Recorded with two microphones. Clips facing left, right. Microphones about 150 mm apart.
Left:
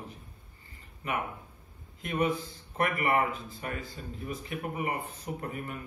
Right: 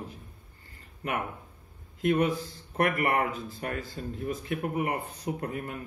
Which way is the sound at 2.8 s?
45° right (ahead or behind).